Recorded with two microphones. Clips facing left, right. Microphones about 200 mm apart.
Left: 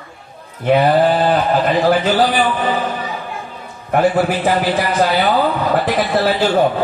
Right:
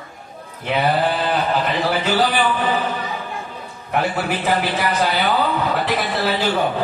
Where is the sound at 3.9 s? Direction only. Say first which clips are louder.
Left 7 dB; 50° left (ahead or behind).